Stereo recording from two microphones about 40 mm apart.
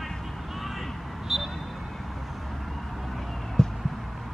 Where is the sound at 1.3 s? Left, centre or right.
Centre.